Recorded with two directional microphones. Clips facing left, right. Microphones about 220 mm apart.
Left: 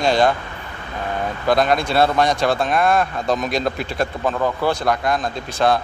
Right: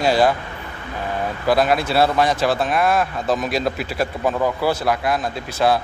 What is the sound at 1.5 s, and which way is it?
Speech, 5° right (ahead or behind).